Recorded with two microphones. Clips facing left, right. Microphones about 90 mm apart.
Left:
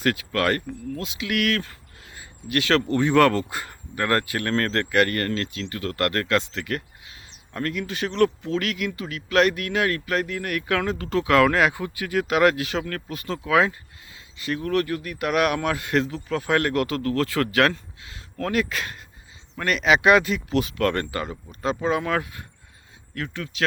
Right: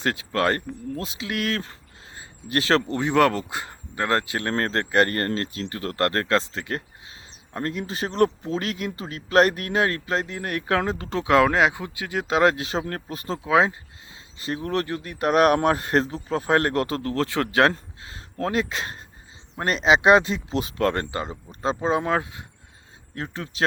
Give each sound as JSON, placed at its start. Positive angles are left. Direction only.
{"t": 0.0, "sound": "speech", "side_deg": -25}
{"t": 2.1, "sound": "a sound", "side_deg": -30}
{"t": 3.0, "sound": "speech", "side_deg": -15}